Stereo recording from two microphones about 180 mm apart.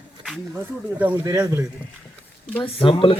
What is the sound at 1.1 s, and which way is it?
Speech, 20° right (ahead or behind).